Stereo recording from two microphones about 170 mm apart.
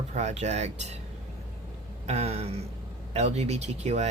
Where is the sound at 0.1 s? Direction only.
40° right (ahead or behind).